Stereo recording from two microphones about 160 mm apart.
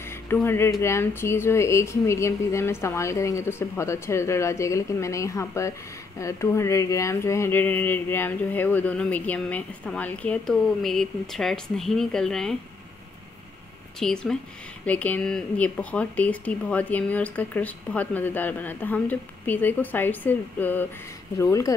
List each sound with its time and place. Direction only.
0.0 s speech: 15° left (ahead or behind)
13.9 s speech: 5° left (ahead or behind); by 21.7 s 20° left (ahead or behind)